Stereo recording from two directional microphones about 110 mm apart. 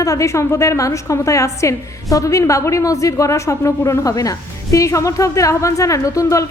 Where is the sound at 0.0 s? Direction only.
30° left (ahead or behind).